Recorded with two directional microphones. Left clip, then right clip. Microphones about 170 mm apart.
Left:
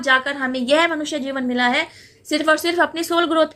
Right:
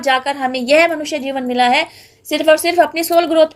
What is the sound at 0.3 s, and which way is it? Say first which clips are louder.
A woman's voice: right 4 dB; 20° right (ahead or behind).